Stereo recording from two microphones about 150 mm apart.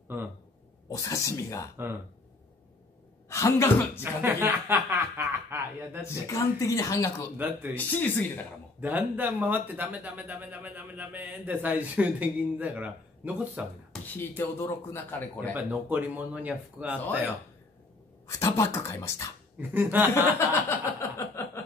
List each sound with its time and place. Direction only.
0.1 s speech: 15° right (ahead or behind)
0.8 s a woman's voice: 20° left (ahead or behind)
3.3 s speech: 20° left (ahead or behind)
4.0 s speech: 15° right (ahead or behind)
6.2 s a woman's voice: 20° left (ahead or behind)
7.3 s speech: 10° right (ahead or behind)
7.7 s speech: 10° left (ahead or behind)
8.8 s speech: 10° right (ahead or behind)
14.1 s speech: 15° left (ahead or behind)
15.5 s speech: 10° right (ahead or behind)
18.4 s a woman's voice: 20° left (ahead or behind)
19.7 s speech: 15° right (ahead or behind)
20.3 s a sound: 20° left (ahead or behind)